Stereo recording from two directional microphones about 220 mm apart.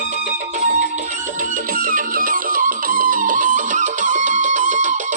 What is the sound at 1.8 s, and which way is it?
Music, 40° right (ahead or behind).